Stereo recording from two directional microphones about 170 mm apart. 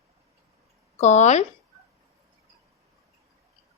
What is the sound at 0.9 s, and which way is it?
Speech, 40° left (ahead or behind).